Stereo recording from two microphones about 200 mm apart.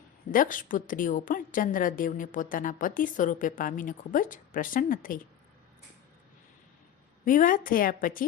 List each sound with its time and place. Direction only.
0.3 s a woman's voice: 40° left (ahead or behind)
7.3 s a woman's voice: 40° left (ahead or behind)